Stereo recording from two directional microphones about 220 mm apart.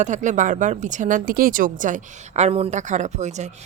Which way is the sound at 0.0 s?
35° right (ahead or behind).